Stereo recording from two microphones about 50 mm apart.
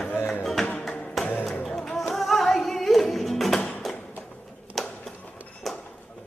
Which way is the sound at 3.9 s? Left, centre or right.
Centre.